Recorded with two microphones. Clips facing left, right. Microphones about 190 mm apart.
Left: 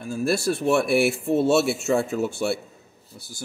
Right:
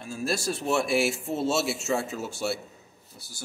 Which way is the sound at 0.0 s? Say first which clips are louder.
Left 6 dB; 60° left (ahead or behind).